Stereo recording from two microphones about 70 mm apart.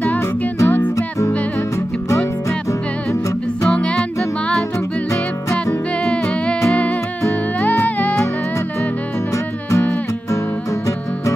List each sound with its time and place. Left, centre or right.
0.7 s music: left
3.6 s music: centre
6.0 s music: centre
7.6 s music: left